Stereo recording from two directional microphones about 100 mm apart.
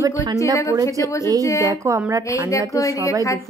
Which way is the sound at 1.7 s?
30° right (ahead or behind).